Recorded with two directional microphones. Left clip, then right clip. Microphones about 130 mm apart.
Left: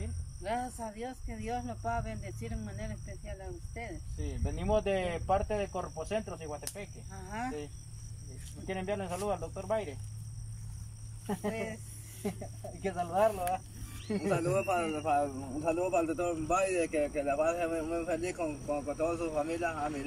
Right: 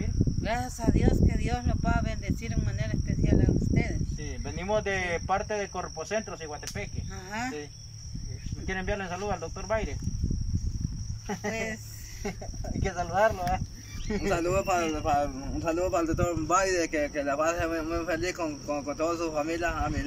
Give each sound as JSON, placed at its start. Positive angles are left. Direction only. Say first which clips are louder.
{"t": 0.4, "sound": "a man's voice", "louder": "right 2 dB", "side_deg": 0}
{"t": 4.6, "sound": "speech", "louder": "right 2 dB", "side_deg": 25}
{"t": 7.2, "sound": "a man's voice", "louder": "right 4 dB", "side_deg": -5}
{"t": 8.6, "sound": "speech", "louder": "right 4 dB", "side_deg": 25}
{"t": 11.4, "sound": "a man's voice", "louder": "right 6 dB", "side_deg": 5}